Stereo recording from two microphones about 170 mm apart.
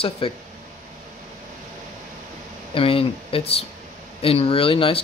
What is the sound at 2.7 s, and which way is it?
Speech, 35° left (ahead or behind).